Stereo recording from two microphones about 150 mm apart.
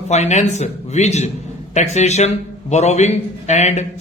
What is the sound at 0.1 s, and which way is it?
Speech, 50° left (ahead or behind).